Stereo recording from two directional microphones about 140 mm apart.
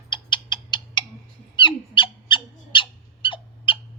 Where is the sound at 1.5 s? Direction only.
35° left (ahead or behind).